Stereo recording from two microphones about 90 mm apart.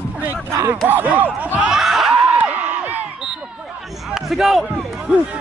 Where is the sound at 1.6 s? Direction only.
5° right (ahead or behind).